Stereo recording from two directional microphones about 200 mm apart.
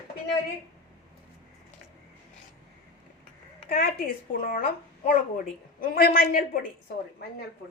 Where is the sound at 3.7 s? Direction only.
50° left (ahead or behind).